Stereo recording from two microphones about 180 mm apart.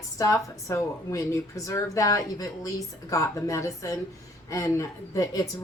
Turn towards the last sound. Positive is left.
turn(degrees=20)  # may be behind; listen again after turning